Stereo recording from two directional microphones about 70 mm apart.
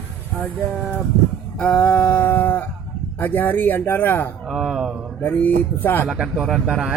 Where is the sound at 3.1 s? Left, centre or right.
Left.